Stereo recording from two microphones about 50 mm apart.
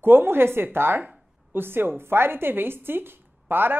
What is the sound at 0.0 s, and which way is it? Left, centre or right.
A woman's voice, right.